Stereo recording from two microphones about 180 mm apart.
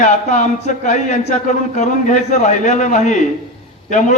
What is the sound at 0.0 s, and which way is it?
A man's voice, 40° left (ahead or behind).